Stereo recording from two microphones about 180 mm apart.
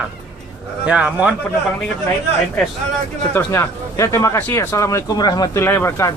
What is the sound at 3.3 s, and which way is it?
Speech, 15° left (ahead or behind).